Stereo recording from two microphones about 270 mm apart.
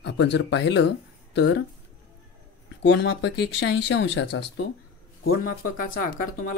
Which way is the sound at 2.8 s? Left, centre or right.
Left.